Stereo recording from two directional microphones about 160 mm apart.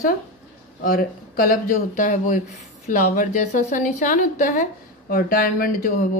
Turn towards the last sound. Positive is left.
turn(degrees=60)  # may be behind; listen again after turning